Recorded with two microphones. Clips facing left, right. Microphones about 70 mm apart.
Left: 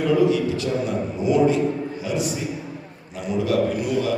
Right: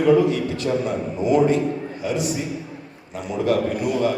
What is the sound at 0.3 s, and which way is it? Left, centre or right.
A man's voice, right.